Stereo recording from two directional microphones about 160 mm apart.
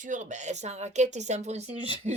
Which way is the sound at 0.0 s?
50° right (ahead or behind).